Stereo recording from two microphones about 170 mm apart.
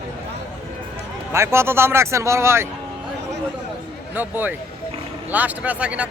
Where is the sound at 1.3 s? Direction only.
15° right (ahead or behind).